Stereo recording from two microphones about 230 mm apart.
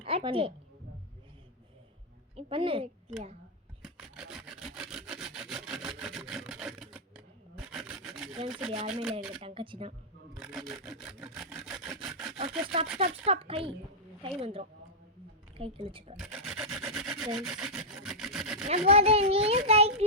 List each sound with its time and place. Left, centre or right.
0.0 s a woman's voice: right
2.3 s a child's voice: right
3.8 s wood: centre
7.5 s rub: centre
7.9 s wood: centre
8.4 s speech: centre
9.4 s a child's voice: right
10.3 s wood: centre
12.4 s sawing: right
13.0 s a child's voice: right
16.1 s rub: centre
17.3 s speech: centre
18.9 s a child's voice: right